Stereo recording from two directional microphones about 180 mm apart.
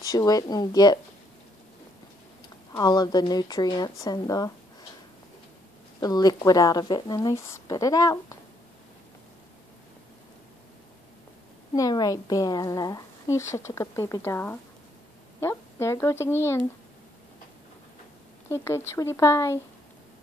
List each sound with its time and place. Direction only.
0.0 s speech: 20° left (ahead or behind)
2.7 s speech: 20° left (ahead or behind)
5.9 s speech: 20° left (ahead or behind)
11.7 s speech: 20° left (ahead or behind)
18.5 s speech: 15° left (ahead or behind)